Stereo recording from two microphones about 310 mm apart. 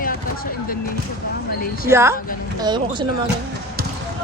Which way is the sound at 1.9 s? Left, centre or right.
Centre.